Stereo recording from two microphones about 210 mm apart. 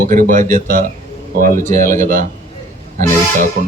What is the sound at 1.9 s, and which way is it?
Speech, 40° right (ahead or behind).